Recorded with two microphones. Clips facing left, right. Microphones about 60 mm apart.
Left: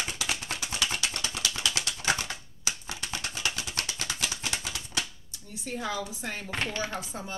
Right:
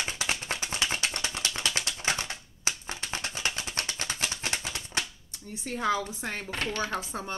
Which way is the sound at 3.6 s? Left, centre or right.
Right.